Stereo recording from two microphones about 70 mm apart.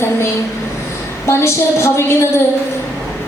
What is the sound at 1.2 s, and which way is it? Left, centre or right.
A woman's voice, left.